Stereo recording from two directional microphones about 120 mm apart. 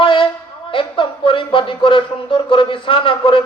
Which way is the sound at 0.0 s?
45° left (ahead or behind).